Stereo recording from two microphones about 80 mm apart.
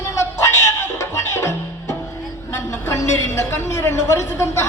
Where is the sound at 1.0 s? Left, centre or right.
Left.